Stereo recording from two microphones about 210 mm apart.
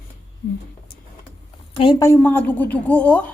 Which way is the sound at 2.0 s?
10° left (ahead or behind).